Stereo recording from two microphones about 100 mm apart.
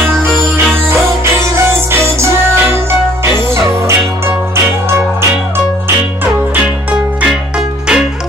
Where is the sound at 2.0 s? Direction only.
25° right (ahead or behind).